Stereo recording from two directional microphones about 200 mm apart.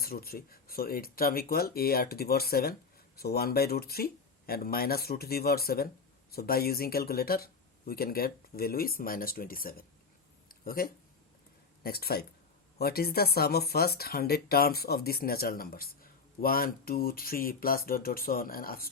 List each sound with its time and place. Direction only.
0.0 s speech: 50° left (ahead or behind)
10.5 s a sound: 45° left (ahead or behind)
11.8 s speech: 50° left (ahead or behind)